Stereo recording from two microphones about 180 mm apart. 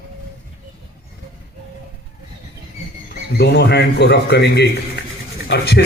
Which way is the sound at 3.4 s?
70° left (ahead or behind).